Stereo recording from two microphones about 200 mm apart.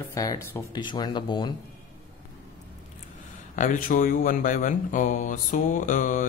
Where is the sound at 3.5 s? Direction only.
40° left (ahead or behind).